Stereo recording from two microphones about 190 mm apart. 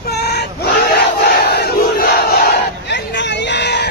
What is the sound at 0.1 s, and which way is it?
Battle cry, 60° left (ahead or behind).